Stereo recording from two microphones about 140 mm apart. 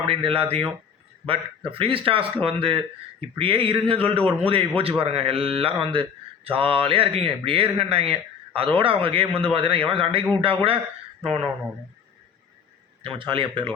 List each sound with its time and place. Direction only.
0.0 s a man's voice: 40° right (ahead or behind)
1.8 s a man's voice: 40° right (ahead or behind)
13.0 s a man's voice: 40° right (ahead or behind)